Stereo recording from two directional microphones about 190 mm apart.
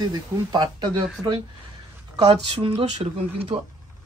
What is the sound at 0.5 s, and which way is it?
Speech, 20° right (ahead or behind).